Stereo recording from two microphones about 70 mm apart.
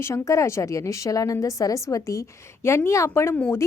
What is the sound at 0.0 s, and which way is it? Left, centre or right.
Speech, left.